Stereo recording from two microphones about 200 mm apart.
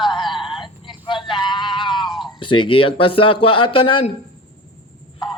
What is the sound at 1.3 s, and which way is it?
Music, 25° left (ahead or behind).